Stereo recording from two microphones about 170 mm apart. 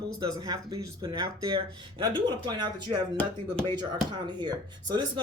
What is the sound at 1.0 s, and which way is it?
Speech, 25° right (ahead or behind).